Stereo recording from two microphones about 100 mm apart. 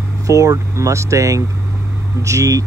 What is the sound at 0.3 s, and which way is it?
Speech, 35° right (ahead or behind).